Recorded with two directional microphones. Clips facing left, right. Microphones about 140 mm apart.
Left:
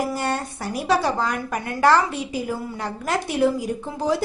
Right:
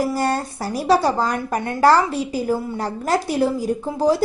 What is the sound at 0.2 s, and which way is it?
A woman's voice, 35° right (ahead or behind).